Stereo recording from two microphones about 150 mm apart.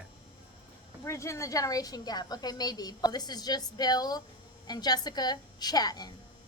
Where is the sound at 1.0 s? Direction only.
20° left (ahead or behind).